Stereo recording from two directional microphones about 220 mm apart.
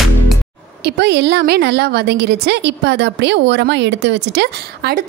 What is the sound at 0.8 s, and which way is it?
A woman's voice, 50° right (ahead or behind).